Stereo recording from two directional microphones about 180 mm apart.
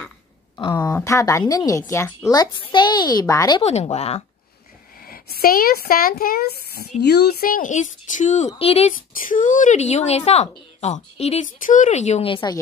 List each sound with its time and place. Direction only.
0.9 s a woman's voice: 15° left (ahead or behind)
3.6 s speech: 35° left (ahead or behind)
5.0 s speech: 55° left (ahead or behind)
8.5 s speech: 35° left (ahead or behind)
9.2 s speech: 45° left (ahead or behind)